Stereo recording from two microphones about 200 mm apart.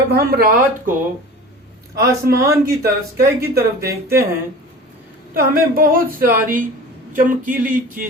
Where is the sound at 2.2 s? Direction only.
50° right (ahead or behind).